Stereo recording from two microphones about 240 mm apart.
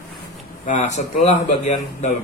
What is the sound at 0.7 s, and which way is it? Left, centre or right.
Speech, left.